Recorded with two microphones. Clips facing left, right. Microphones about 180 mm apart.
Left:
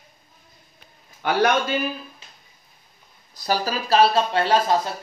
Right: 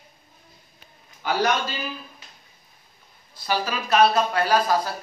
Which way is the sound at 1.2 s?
55° left (ahead or behind).